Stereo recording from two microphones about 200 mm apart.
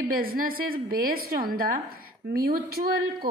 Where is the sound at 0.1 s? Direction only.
45° right (ahead or behind).